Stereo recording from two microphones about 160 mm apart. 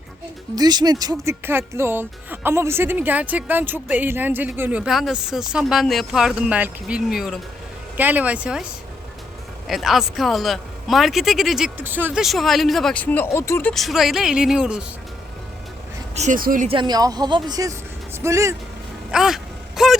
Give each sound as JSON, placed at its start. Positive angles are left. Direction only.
{"t": 0.5, "sound": "a woman's voice", "side_deg": -25}
{"t": 9.6, "sound": "a man's voice", "side_deg": 0}
{"t": 16.1, "sound": "speech", "side_deg": -45}
{"t": 16.4, "sound": "speech", "side_deg": -60}
{"t": 16.6, "sound": "a woman's voice", "side_deg": -30}
{"t": 19.1, "sound": "a sound", "side_deg": -5}